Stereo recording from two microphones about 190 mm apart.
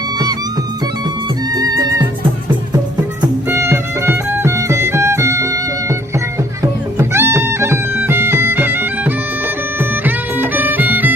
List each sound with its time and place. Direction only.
1.5 s music: 20° right (ahead or behind)
3.2 s music: 15° right (ahead or behind)
7.0 s music: 15° right (ahead or behind)